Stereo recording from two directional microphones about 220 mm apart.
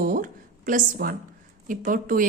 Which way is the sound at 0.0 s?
40° right (ahead or behind).